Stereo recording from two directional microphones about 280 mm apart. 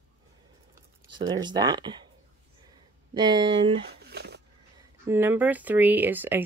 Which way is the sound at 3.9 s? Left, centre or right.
Right.